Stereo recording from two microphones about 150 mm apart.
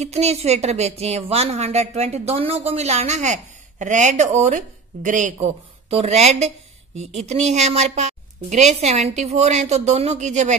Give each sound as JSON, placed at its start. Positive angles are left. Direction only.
{"t": 0.0, "sound": "a woman's voice", "side_deg": -45}